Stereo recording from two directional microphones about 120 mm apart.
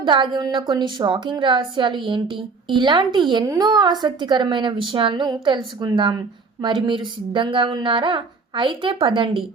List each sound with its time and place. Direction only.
0.0 s a woman's voice: 40° right (ahead or behind)